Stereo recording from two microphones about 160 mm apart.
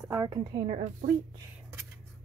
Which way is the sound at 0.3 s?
30° right (ahead or behind).